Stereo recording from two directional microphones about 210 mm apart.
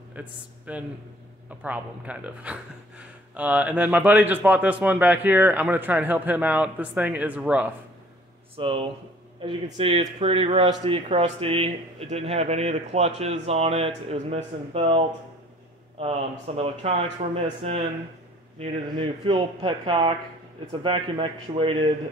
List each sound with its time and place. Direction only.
0.1 s a man's voice: 5° right (ahead or behind)
8.5 s speech: 25° right (ahead or behind)
18.6 s speech: 25° right (ahead or behind)